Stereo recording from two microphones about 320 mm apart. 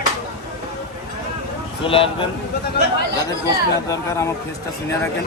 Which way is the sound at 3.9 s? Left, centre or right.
Centre.